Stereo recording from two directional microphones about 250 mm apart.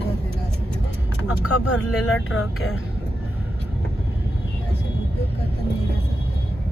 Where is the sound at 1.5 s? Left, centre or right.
Left.